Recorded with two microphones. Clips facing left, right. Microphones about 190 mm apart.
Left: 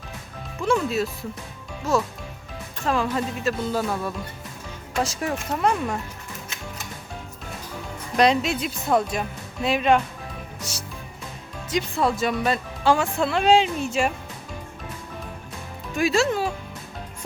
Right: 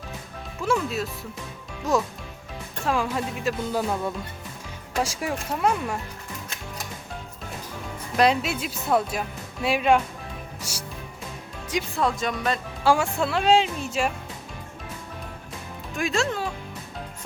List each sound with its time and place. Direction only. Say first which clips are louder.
0.6 s speech: left 3 dB; 5° right (ahead or behind)
8.1 s speech: left 2 dB; 5° right (ahead or behind)
10.6 s music: left 1 dB; 10° right (ahead or behind)
11.9 s speech: left 3 dB; 5° left (ahead or behind)
12.8 s speech: left 1 dB; 10° right (ahead or behind)
16.0 s speech: left 4 dB; 5° left (ahead or behind)